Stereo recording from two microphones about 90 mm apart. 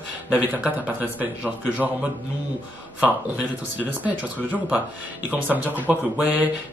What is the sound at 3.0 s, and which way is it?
Speech, 15° right (ahead or behind).